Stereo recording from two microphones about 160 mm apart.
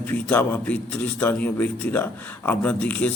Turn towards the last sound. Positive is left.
turn(degrees=10)  # may be behind; listen again after turning